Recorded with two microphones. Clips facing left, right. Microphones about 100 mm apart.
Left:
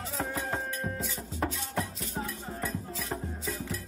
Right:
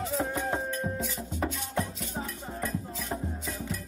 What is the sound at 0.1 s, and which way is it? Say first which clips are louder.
Music: right 1 dB; centre (ahead or behind).